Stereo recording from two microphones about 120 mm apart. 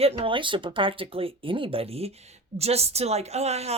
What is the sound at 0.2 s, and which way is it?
A woman's voice, 45° right (ahead or behind).